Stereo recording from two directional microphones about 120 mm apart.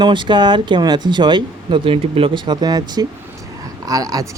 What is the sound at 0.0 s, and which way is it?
Speech, 40° right (ahead or behind).